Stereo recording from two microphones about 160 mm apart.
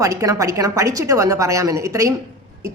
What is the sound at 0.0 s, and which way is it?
A woman's voice, 20° right (ahead or behind).